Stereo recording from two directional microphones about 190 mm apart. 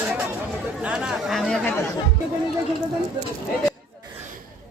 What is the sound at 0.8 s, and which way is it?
Chatter, 5° right (ahead or behind).